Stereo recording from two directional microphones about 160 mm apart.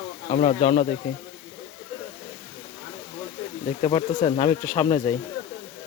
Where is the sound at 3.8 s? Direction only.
30° left (ahead or behind).